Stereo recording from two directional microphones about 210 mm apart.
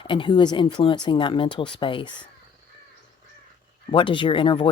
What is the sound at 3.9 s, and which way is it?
Speech, 25° left (ahead or behind).